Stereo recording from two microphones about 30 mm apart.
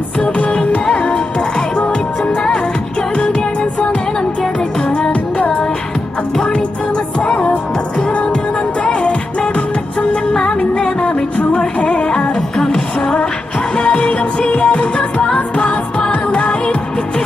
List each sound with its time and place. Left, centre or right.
0.8 s music: left
3.2 s music: left
5.4 s music: left
8.1 s music: left
10.7 s music: left
12.5 s music: left